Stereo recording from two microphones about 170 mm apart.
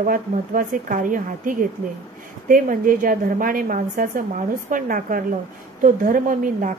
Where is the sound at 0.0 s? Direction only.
50° right (ahead or behind).